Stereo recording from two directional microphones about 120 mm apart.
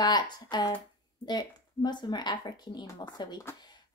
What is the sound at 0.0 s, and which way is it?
A woman's voice, 35° left (ahead or behind).